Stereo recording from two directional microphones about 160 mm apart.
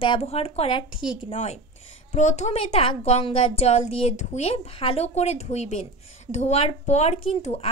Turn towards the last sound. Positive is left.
turn(degrees=40)  # may be behind; listen again after turning